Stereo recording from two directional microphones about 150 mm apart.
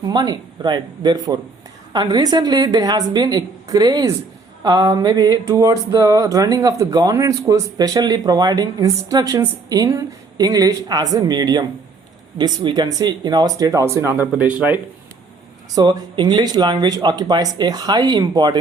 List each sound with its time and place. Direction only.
0.0 s speech: 25° right (ahead or behind); by 14.8 s 10° right (ahead or behind)
15.7 s speech: 30° right (ahead or behind)